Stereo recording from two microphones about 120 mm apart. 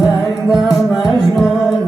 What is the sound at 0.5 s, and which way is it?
Music, 5° right (ahead or behind).